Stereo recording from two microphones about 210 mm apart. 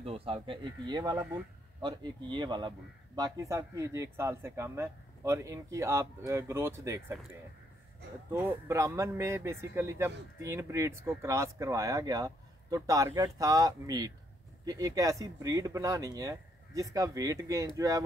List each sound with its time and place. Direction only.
0.0 s speech: 25° right (ahead or behind)
8.3 s speech: 10° right (ahead or behind)